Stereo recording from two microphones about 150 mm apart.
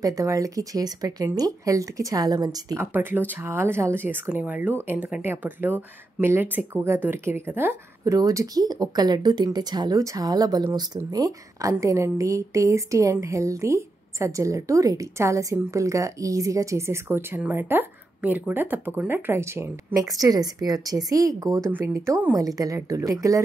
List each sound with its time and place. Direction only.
0.0 s speech: 20° right (ahead or behind)
2.9 s speech: 15° right (ahead or behind)